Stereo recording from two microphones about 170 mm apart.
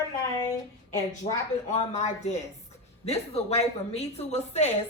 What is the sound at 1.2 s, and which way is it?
A woman's voice, 40° left (ahead or behind).